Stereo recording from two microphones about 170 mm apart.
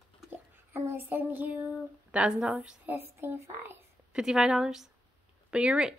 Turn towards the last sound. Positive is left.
turn(degrees=-5)  # may be behind; listen again after turning